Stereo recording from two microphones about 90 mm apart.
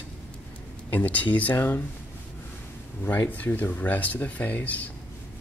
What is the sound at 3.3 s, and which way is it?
Speech, 20° left (ahead or behind).